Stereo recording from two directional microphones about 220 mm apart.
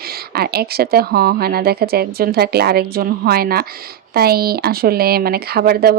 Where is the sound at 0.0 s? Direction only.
45° right (ahead or behind).